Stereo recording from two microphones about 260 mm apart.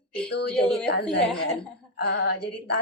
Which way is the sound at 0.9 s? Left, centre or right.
Left.